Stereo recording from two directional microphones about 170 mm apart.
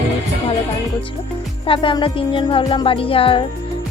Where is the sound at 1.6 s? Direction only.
30° left (ahead or behind).